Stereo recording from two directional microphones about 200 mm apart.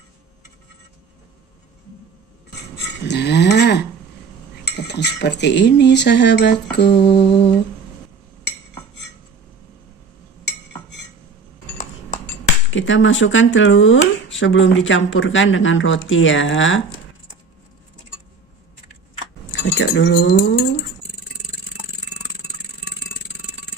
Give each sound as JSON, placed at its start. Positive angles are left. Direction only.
{"t": 3.0, "sound": "a sound", "side_deg": 55}
{"t": 4.8, "sound": "speech", "side_deg": 60}
{"t": 7.2, "sound": "humming", "side_deg": 25}
{"t": 12.7, "sound": "speech", "side_deg": 70}
{"t": 19.5, "sound": "speech", "side_deg": 65}